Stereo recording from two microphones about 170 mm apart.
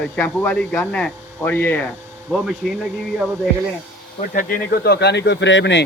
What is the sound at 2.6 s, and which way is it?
Speech, centre (ahead or behind).